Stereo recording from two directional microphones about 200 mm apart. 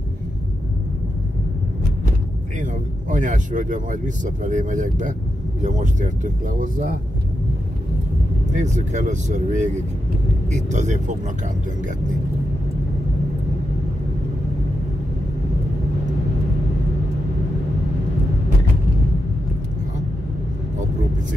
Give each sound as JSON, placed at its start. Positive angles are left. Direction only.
{"t": 2.6, "sound": "speech", "side_deg": -40}
{"t": 8.5, "sound": "speech", "side_deg": -35}